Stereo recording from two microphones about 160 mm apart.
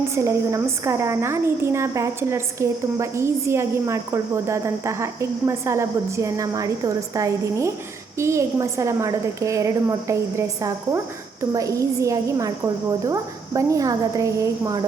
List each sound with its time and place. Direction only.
0.2 s a woman's voice: 20° right (ahead or behind)